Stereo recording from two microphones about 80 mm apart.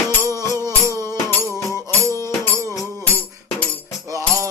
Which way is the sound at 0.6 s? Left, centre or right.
Right.